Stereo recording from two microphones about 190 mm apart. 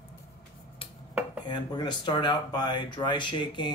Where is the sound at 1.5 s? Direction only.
25° left (ahead or behind).